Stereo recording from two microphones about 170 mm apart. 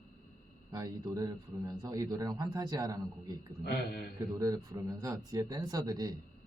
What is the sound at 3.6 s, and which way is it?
Speech, 65° left (ahead or behind).